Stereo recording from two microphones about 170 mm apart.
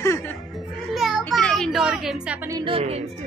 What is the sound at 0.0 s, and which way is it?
Music, 15° left (ahead or behind).